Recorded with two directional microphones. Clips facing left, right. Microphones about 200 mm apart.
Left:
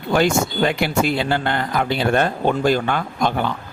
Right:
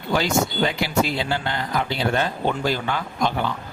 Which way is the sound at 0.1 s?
55° left (ahead or behind).